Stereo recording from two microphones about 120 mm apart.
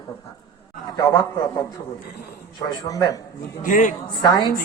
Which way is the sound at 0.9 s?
35° left (ahead or behind).